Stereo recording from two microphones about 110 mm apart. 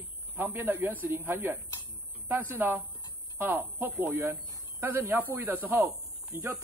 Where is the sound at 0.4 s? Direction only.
20° right (ahead or behind).